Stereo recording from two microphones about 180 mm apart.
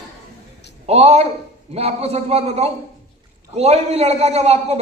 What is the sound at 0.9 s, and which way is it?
A man's voice, 35° right (ahead or behind).